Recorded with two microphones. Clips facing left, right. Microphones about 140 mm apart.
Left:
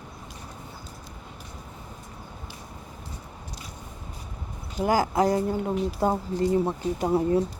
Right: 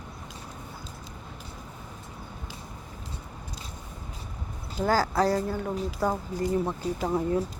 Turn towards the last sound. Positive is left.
turn(degrees=25)  # may be behind; listen again after turning